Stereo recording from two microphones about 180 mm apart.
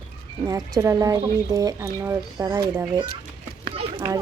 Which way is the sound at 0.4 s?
20° right (ahead or behind).